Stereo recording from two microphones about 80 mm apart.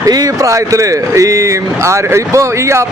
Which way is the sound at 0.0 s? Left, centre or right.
Right.